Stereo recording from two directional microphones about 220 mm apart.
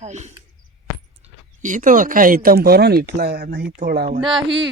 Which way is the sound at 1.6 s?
35° right (ahead or behind).